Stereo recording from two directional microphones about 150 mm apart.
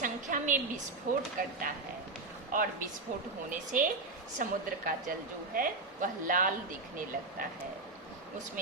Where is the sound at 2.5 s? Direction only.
65° right (ahead or behind).